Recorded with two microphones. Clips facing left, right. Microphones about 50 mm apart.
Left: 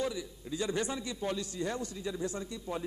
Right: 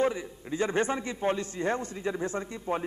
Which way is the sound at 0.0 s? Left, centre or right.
Right.